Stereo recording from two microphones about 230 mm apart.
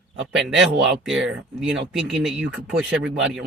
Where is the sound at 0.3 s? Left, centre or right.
Centre.